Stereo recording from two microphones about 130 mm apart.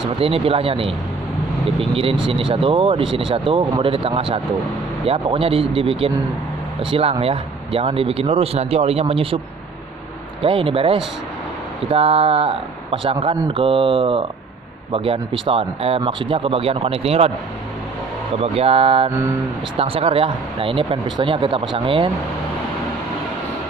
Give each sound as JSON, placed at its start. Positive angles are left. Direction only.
{"t": 0.2, "sound": "speech", "side_deg": -45}
{"t": 10.4, "sound": "speech", "side_deg": -45}
{"t": 18.3, "sound": "speech", "side_deg": -50}